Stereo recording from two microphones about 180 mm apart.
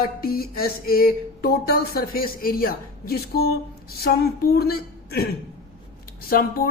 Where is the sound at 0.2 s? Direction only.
55° left (ahead or behind).